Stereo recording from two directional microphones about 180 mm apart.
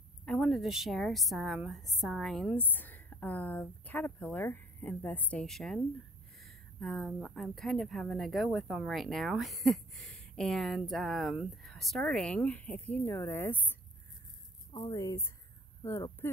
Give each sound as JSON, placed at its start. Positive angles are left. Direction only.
{"t": 0.2, "sound": "speech", "side_deg": 5}
{"t": 14.7, "sound": "speech", "side_deg": 20}